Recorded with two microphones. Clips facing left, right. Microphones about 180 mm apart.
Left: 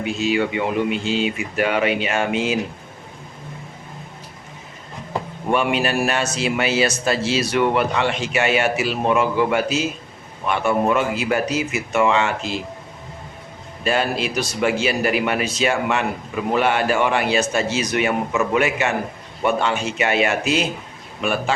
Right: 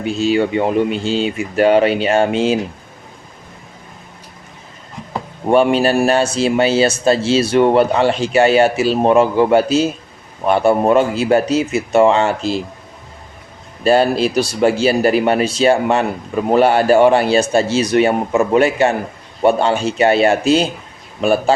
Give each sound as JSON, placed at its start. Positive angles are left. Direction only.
{"t": 0.0, "sound": "a man's voice", "side_deg": -30}
{"t": 5.5, "sound": "a man's voice", "side_deg": -35}
{"t": 13.8, "sound": "a man's voice", "side_deg": -35}